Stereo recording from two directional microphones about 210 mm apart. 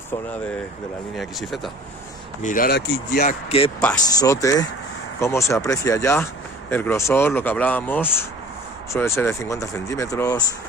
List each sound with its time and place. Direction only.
1.1 s speech: centre (ahead or behind)
2.4 s speech: 40° left (ahead or behind)
3.2 s speech: 30° left (ahead or behind)
4.2 s speech: 15° left (ahead or behind)